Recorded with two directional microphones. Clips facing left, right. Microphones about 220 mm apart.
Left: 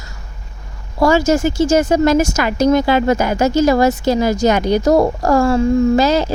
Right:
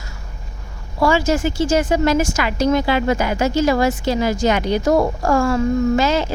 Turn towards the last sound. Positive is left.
turn(degrees=40)  # may be behind; listen again after turning